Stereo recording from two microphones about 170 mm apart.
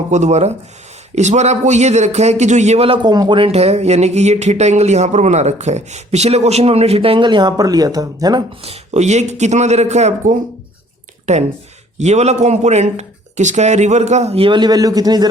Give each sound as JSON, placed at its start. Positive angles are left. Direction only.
{"t": 0.1, "sound": "a man's voice", "side_deg": -40}
{"t": 8.6, "sound": "a man's voice", "side_deg": -40}